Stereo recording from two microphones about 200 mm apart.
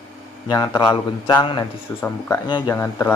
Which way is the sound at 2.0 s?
10° left (ahead or behind).